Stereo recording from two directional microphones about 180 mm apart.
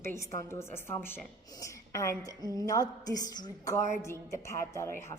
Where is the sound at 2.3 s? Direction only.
20° right (ahead or behind).